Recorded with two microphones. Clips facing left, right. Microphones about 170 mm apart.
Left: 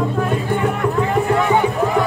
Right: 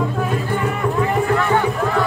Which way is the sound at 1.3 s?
15° left (ahead or behind).